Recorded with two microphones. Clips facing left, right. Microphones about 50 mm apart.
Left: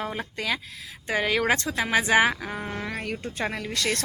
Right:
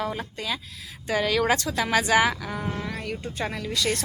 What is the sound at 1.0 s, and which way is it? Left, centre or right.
Speech, left.